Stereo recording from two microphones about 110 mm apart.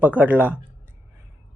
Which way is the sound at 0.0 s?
15° right (ahead or behind).